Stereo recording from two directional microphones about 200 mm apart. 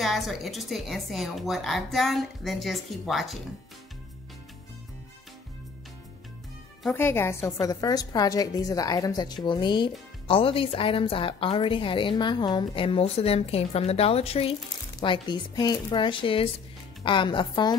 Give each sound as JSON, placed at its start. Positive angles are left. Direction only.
{"t": 0.0, "sound": "a woman's voice", "side_deg": 0}
{"t": 6.8, "sound": "a woman's voice", "side_deg": 10}